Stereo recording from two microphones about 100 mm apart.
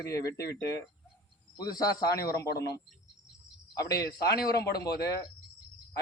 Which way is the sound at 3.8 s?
35° left (ahead or behind).